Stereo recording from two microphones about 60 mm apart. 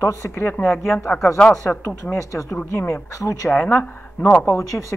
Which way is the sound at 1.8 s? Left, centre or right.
Left.